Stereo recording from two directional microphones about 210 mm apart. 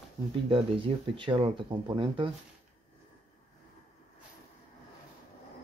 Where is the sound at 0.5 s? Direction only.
25° right (ahead or behind).